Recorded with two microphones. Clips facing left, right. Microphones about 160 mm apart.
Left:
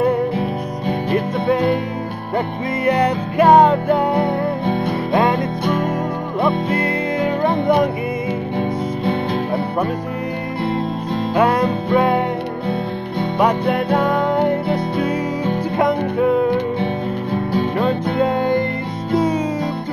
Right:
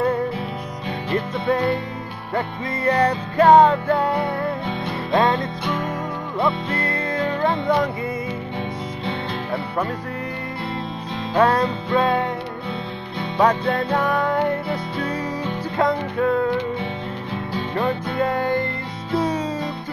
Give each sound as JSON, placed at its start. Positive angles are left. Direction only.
{"t": 1.1, "sound": "music", "side_deg": 15}
{"t": 4.6, "sound": "music", "side_deg": 50}
{"t": 5.1, "sound": "music", "side_deg": 15}
{"t": 8.5, "sound": "music", "side_deg": 50}
{"t": 11.3, "sound": "music", "side_deg": 15}
{"t": 13.4, "sound": "music", "side_deg": 15}
{"t": 16.8, "sound": "music", "side_deg": 50}
{"t": 18.2, "sound": "music", "side_deg": 20}